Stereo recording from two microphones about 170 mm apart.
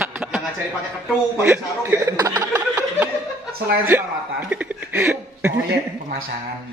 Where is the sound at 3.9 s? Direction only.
15° right (ahead or behind).